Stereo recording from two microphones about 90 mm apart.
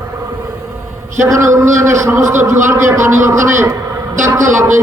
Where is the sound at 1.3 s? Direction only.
35° right (ahead or behind).